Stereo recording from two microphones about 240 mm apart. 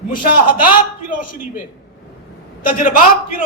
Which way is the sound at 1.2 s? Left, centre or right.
Left.